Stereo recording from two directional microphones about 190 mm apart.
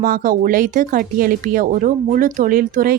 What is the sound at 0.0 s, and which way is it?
Speech, 45° right (ahead or behind).